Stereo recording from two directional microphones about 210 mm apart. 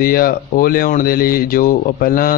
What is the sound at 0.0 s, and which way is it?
Speech, 45° left (ahead or behind).